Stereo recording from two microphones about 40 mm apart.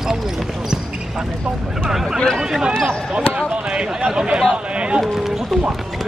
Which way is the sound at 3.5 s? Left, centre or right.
Right.